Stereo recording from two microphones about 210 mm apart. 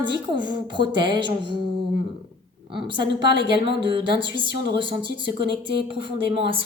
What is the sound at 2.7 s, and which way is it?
Speech, 25° right (ahead or behind).